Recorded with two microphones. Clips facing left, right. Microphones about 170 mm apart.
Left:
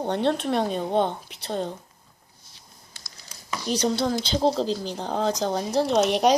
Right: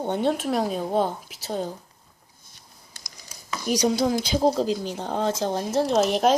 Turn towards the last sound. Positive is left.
turn(degrees=0)  # may be behind; listen again after turning